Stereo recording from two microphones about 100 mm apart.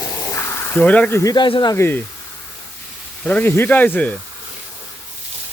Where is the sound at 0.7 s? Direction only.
15° left (ahead or behind).